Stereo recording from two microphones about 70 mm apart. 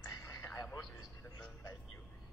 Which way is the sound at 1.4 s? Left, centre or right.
Left.